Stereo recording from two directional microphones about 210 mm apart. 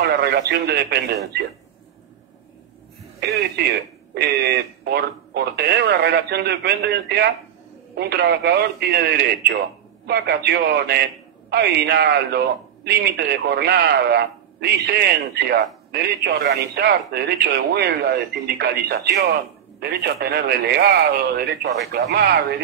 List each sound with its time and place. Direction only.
0.1 s speech: 50° right (ahead or behind)
3.2 s speech: 50° right (ahead or behind)